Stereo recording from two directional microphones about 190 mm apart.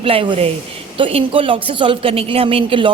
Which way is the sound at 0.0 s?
30° right (ahead or behind).